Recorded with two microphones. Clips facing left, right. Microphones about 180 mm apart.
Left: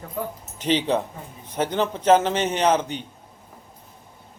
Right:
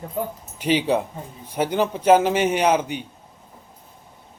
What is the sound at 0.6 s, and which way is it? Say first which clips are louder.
A man's voice: right 2 dB; 10° right (ahead or behind).